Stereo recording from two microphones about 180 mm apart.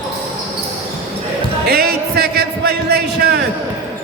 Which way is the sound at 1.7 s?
60° right (ahead or behind).